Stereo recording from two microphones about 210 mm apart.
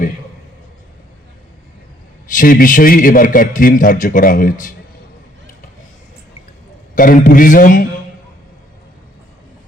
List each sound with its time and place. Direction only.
2.3 s a man's voice: 40° left (ahead or behind)
6.9 s a man's voice: 40° left (ahead or behind)